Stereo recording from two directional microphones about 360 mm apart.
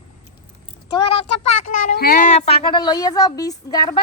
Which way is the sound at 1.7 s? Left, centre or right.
Left.